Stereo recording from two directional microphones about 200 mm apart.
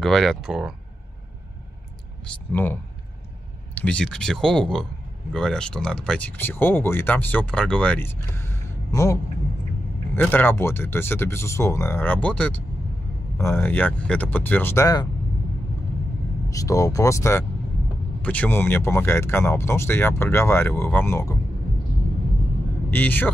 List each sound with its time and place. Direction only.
0.0 s speech: centre (ahead or behind)
2.2 s speech: 10° left (ahead or behind)
16.4 s speech: 15° left (ahead or behind)
22.8 s speech: 10° left (ahead or behind)